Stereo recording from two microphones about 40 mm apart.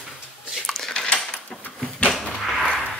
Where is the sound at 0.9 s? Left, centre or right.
Left.